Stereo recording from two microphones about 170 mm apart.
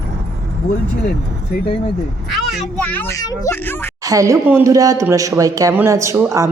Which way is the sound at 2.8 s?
10° left (ahead or behind).